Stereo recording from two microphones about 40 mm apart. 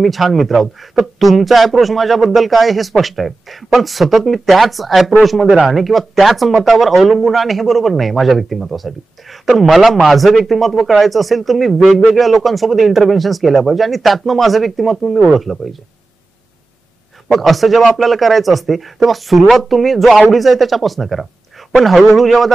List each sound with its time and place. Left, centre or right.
0.0 s speech: centre
17.3 s speech: centre